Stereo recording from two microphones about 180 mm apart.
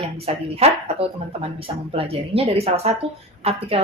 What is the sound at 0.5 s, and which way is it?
A woman's voice, 35° right (ahead or behind).